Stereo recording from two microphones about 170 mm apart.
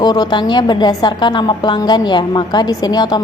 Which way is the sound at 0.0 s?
25° left (ahead or behind).